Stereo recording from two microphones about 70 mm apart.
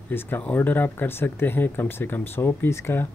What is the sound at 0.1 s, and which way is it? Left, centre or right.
Speech, left.